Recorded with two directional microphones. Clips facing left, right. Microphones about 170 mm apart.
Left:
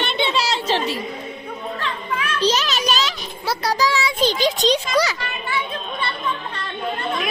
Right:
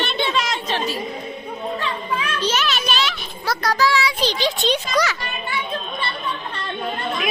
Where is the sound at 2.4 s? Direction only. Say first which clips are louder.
Left 5 dB; 35° left (ahead or behind).